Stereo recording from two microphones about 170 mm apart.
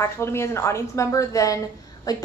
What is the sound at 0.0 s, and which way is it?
A woman's voice, 15° left (ahead or behind).